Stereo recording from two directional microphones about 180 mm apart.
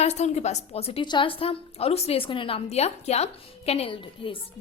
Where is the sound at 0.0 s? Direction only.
40° left (ahead or behind).